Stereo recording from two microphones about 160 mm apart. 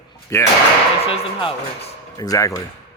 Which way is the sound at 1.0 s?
35° left (ahead or behind).